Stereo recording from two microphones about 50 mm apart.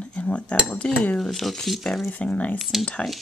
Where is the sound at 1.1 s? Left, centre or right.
Centre.